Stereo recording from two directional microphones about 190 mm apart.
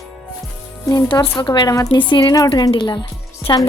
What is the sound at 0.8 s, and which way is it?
A woman's voice, 15° left (ahead or behind).